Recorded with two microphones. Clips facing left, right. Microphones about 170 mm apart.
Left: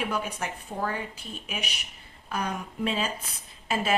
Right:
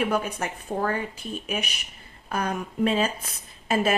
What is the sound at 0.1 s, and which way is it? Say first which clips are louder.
Speech: right 4 dB; 50° right (ahead or behind).